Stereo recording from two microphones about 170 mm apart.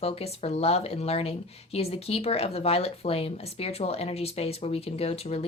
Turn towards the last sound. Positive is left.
turn(degrees=35)  # may be behind; listen again after turning